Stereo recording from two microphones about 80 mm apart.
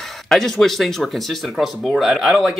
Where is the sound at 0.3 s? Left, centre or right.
Centre.